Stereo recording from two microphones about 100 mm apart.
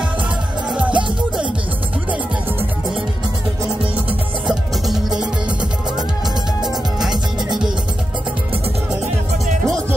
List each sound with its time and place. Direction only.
0.7 s music: 10° right (ahead or behind)
4.5 s music: 5° right (ahead or behind)
6.6 s music: 5° right (ahead or behind)